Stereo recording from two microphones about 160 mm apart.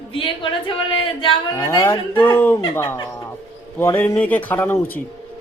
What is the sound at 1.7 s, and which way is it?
A man's voice, 15° left (ahead or behind).